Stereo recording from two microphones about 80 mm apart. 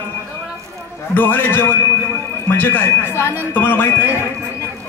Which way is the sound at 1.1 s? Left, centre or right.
Left.